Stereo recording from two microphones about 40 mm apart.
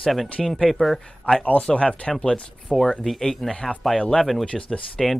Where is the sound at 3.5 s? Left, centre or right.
Left.